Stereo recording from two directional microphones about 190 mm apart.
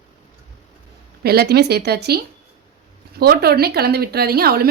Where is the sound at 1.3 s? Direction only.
55° right (ahead or behind).